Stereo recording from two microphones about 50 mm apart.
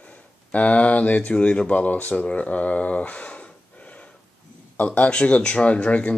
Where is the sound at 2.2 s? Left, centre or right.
Left.